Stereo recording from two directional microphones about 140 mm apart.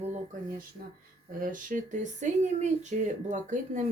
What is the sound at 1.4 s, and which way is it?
Speech, 70° right (ahead or behind).